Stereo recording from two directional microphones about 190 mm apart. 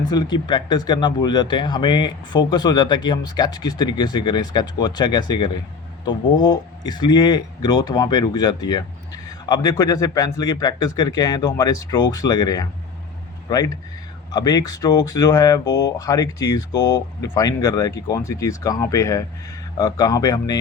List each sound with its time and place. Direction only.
0.0 s speech: 20° left (ahead or behind)
15.6 s speech: 65° left (ahead or behind)
16.0 s speech: 20° left (ahead or behind)